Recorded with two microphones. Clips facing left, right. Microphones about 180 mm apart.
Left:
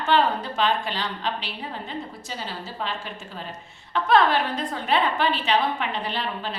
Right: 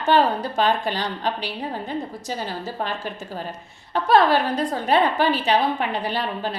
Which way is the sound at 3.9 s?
40° right (ahead or behind).